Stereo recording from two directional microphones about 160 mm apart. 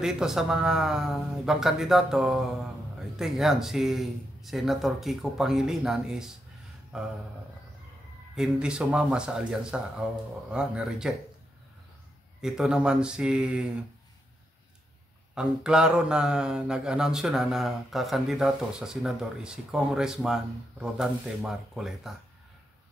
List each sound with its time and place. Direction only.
0.0 s mantra: 5° right (ahead or behind)
6.9 s speech: 5° right (ahead or behind)
8.4 s mantra: 5° right (ahead or behind)
12.4 s mantra: 5° right (ahead or behind)
15.3 s mantra: 5° right (ahead or behind)